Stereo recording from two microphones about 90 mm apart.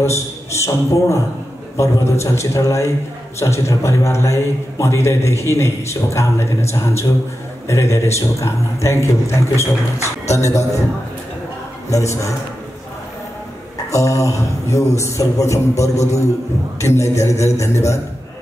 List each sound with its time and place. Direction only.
0.0 s a man's voice: 30° left (ahead or behind)
11.9 s a man's voice: 35° left (ahead or behind)
13.9 s a man's voice: 35° left (ahead or behind)